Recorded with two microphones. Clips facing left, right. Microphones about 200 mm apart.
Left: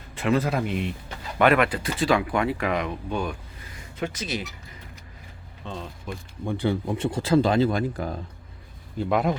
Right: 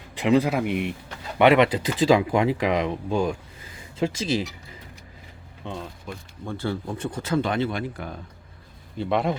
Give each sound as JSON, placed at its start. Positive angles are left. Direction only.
{"t": 0.2, "sound": "a man's voice", "side_deg": -15}
{"t": 5.6, "sound": "a man's voice", "side_deg": -15}
{"t": 6.4, "sound": "speech", "side_deg": 15}
{"t": 9.0, "sound": "speech", "side_deg": 0}